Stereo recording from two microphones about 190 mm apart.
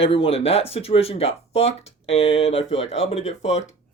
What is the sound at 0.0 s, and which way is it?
Speech, 30° left (ahead or behind).